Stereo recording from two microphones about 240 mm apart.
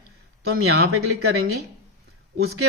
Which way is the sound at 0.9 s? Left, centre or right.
Right.